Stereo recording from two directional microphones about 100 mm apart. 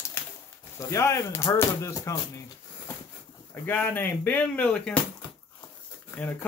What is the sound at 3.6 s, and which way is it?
Speech, 20° left (ahead or behind).